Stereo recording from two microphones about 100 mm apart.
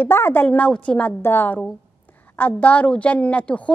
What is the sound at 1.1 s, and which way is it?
A woman's voice, 20° left (ahead or behind).